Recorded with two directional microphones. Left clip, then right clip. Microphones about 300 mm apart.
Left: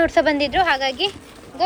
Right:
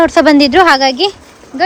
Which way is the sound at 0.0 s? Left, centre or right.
Centre.